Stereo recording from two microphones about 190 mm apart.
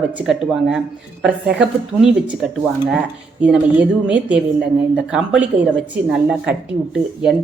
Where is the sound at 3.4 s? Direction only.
5° right (ahead or behind).